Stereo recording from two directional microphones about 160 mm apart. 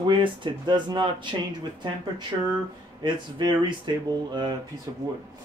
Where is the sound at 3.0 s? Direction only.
30° right (ahead or behind).